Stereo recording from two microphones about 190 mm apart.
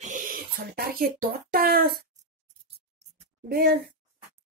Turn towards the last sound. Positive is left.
turn(degrees=-55)  # may be behind; listen again after turning